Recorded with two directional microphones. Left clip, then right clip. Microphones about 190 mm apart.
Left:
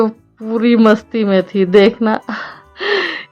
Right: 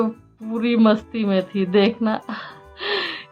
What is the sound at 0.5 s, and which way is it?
Speech, 35° left (ahead or behind).